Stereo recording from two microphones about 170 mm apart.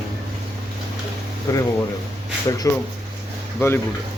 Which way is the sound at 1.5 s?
20° left (ahead or behind).